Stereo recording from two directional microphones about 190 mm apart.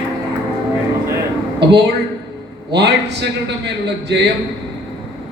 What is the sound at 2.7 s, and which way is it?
A man's voice, 60° right (ahead or behind).